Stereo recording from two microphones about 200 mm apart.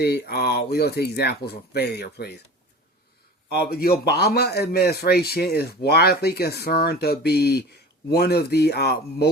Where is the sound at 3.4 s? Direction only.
50° left (ahead or behind).